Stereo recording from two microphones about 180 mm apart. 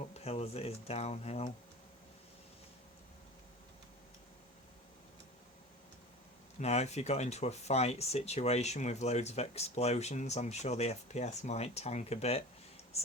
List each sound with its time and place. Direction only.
0.1 s speech: 35° left (ahead or behind)
6.6 s speech: 40° left (ahead or behind)